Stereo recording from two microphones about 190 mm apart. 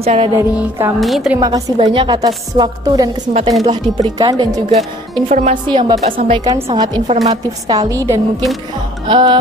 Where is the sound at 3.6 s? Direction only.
35° right (ahead or behind).